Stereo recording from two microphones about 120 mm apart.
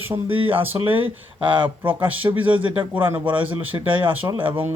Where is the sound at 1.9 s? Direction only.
15° right (ahead or behind).